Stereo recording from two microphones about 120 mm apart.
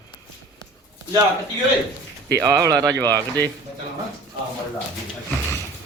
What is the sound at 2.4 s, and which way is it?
Speech, 25° right (ahead or behind).